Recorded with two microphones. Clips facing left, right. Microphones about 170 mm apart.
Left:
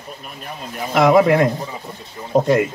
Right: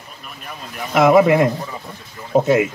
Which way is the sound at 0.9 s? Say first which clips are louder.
Right 1 dB; centre (ahead or behind).